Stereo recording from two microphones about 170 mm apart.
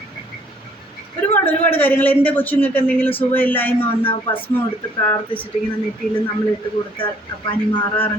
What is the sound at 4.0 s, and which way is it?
Speech, 30° left (ahead or behind).